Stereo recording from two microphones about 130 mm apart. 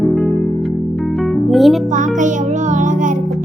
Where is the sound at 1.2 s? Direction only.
Centre (ahead or behind).